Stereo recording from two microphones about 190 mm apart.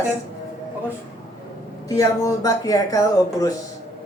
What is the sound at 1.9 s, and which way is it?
Speech, 15° left (ahead or behind).